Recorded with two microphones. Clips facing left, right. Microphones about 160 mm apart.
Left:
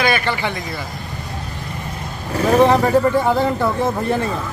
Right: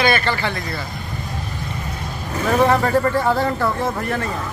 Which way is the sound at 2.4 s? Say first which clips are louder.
Left 3 dB; 15° left (ahead or behind).